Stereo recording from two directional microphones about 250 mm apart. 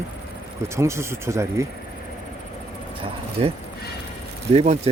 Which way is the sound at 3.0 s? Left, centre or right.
Right.